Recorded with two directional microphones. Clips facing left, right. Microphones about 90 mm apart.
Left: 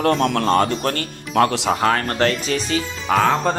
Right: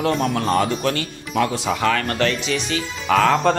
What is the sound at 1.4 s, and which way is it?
Speech, 70° left (ahead or behind).